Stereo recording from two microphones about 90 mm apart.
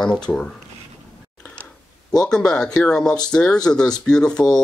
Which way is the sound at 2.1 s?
5° left (ahead or behind).